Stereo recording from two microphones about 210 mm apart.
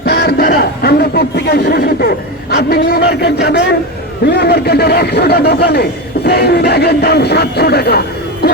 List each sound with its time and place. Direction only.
0.0 s speech: 50° left (ahead or behind)